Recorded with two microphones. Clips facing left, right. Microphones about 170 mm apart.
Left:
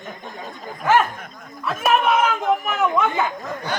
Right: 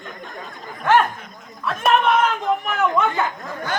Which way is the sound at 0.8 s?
5° left (ahead or behind).